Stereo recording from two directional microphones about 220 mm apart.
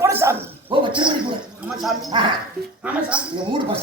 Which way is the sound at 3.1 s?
5° right (ahead or behind).